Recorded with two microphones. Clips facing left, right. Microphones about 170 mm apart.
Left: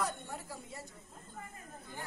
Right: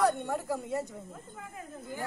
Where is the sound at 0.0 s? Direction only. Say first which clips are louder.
Right 11 dB; 65° right (ahead or behind).